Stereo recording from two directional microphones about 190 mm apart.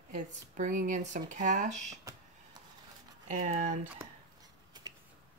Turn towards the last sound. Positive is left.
turn(degrees=-20)  # may be behind; listen again after turning